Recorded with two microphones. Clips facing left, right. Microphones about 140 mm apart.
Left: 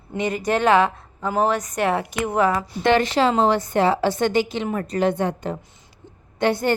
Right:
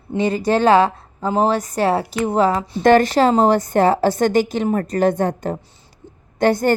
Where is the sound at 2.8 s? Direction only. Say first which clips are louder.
Right 5 dB; 40° right (ahead or behind).